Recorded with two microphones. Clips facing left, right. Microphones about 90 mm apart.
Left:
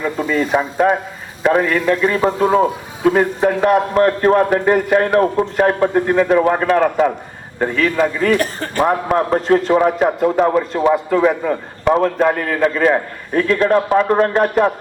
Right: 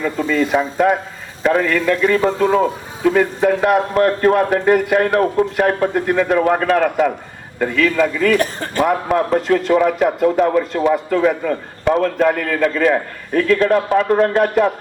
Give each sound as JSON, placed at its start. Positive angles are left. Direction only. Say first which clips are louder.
{"t": 0.3, "sound": "a man's voice", "louder": "even", "side_deg": 35}